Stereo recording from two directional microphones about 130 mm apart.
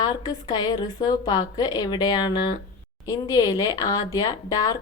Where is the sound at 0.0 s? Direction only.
30° left (ahead or behind).